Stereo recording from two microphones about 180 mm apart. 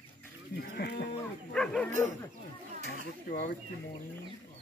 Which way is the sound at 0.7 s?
60° left (ahead or behind).